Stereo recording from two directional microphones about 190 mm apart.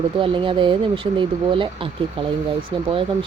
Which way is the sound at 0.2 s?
25° right (ahead or behind).